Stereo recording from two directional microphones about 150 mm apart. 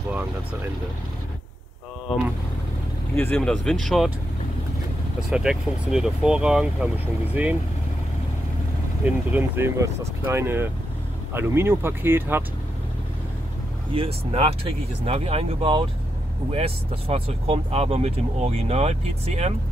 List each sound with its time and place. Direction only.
3.2 s speech: 10° left (ahead or behind)
5.3 s speech: 5° right (ahead or behind)
9.0 s speech: 15° right (ahead or behind)
13.9 s speech: 40° right (ahead or behind)